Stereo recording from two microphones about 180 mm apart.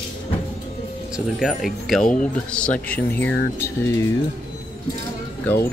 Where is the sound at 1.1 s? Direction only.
Centre (ahead or behind); by 4.0 s 15° left (ahead or behind).